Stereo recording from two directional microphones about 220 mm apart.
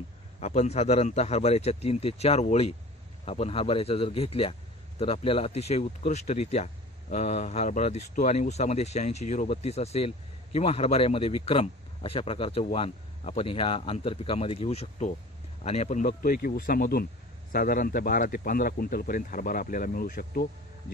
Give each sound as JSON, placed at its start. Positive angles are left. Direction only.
{"t": 0.4, "sound": "a man's voice", "side_deg": 30}